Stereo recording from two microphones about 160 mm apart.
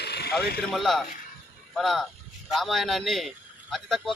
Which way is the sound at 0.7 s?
Centre (ahead or behind).